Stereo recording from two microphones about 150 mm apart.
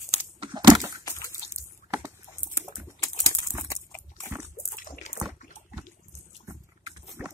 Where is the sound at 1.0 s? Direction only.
20° left (ahead or behind).